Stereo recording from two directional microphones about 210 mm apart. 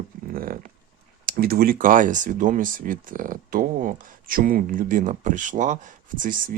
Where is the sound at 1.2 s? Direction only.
45° right (ahead or behind).